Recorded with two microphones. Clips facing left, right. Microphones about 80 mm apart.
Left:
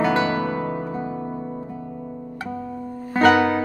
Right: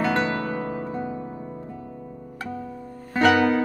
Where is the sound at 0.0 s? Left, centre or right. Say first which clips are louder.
Left 3 dB; centre.